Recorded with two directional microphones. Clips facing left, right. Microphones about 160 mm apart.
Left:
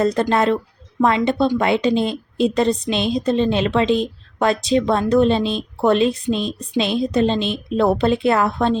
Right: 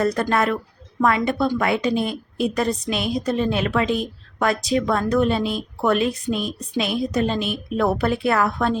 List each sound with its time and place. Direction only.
0.0 s a woman's voice: 25° left (ahead or behind)